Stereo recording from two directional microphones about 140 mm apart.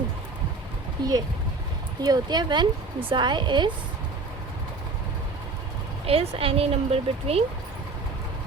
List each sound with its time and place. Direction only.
1.0 s speech: 30° right (ahead or behind)
6.1 s speech: 45° right (ahead or behind)